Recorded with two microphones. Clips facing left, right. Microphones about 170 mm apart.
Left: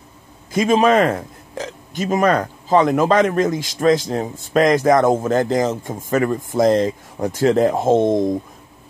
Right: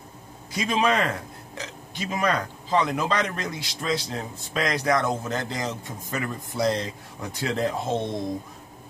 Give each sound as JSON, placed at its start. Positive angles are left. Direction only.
{"t": 0.5, "sound": "a man's voice", "side_deg": 45}